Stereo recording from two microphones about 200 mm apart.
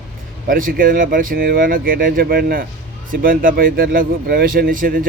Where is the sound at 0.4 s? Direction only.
45° right (ahead or behind).